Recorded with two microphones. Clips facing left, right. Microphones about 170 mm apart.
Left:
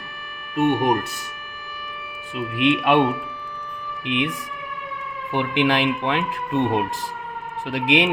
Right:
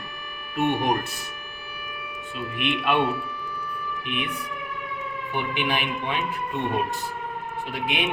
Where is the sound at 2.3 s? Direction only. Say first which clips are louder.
Left 8 dB; 90° left.